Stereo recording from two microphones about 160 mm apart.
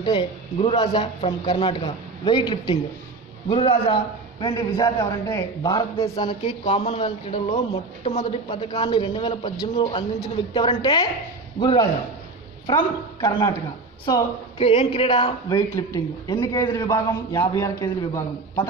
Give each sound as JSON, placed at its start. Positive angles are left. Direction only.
{"t": 0.0, "sound": "a man's voice", "side_deg": 30}
{"t": 15.7, "sound": "a man's voice", "side_deg": 25}